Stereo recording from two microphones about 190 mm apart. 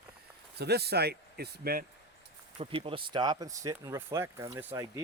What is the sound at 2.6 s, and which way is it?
Speech, 30° right (ahead or behind).